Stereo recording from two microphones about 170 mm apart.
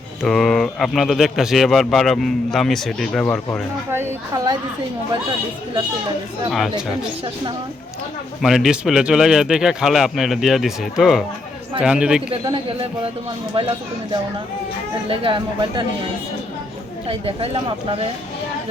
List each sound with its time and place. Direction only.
0.2 s a man's voice: centre (ahead or behind)
3.9 s a woman's voice: 15° right (ahead or behind)
6.5 s a man's voice: centre (ahead or behind)
8.4 s a man's voice: centre (ahead or behind)
12.3 s speech: 30° right (ahead or behind)
15.0 s speech: 30° right (ahead or behind)
17.1 s speech: 35° right (ahead or behind)